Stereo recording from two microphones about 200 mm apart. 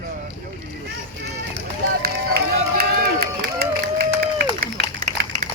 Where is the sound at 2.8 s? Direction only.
50° right (ahead or behind).